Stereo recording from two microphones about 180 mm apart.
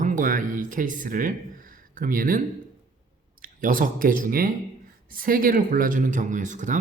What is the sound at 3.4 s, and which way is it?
Speech, 50° right (ahead or behind).